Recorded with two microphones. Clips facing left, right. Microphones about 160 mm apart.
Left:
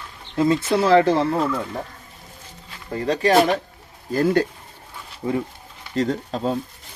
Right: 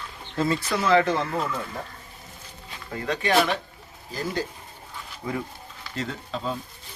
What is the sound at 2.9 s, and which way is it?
Speech, 35° left (ahead or behind).